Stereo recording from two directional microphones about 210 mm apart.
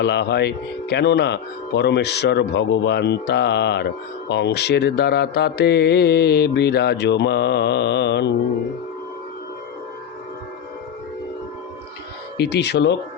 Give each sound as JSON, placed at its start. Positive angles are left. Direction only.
{"t": 0.0, "sound": "speech", "side_deg": 55}
{"t": 12.4, "sound": "speech", "side_deg": 50}